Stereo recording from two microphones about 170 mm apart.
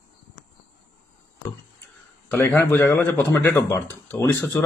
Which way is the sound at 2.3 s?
15° left (ahead or behind).